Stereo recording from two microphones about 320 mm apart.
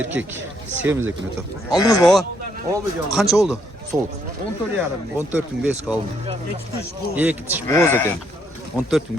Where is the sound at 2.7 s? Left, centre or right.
Centre.